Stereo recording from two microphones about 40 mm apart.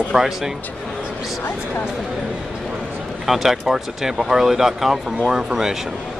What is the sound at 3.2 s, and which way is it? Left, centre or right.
Speech, centre.